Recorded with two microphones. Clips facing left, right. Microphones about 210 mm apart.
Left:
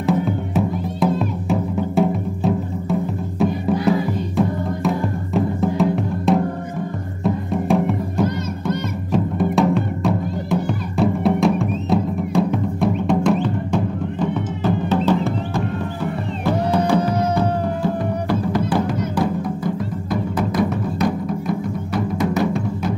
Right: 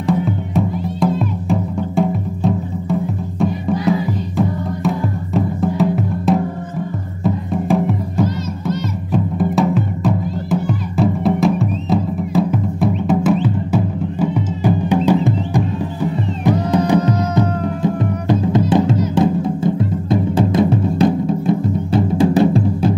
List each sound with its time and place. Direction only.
0.6 s music: centre (ahead or behind); by 22.9 s 30° right (ahead or behind)